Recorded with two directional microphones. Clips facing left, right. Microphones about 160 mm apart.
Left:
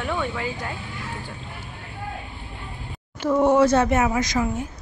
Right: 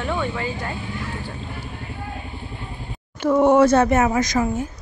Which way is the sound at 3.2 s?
55° right (ahead or behind).